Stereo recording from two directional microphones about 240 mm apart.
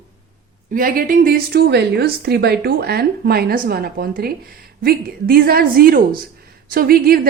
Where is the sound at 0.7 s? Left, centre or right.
Right.